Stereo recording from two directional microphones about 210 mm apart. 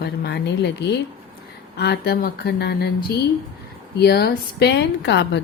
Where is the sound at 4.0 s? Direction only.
50° left (ahead or behind).